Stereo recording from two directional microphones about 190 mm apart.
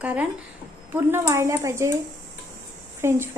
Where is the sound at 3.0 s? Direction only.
15° right (ahead or behind).